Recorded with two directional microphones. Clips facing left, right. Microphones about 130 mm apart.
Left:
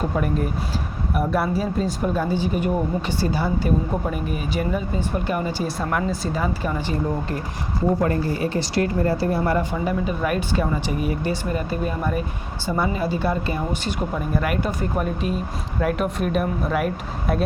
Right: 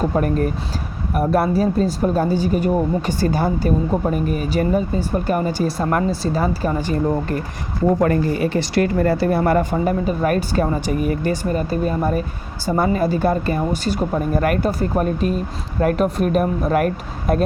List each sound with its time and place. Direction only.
1.1 s speech: 40° right (ahead or behind)
8.0 s speech: 75° right (ahead or behind)
9.7 s speech: 40° right (ahead or behind)